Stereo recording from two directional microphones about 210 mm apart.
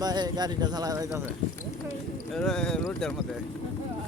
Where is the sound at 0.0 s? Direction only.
20° right (ahead or behind).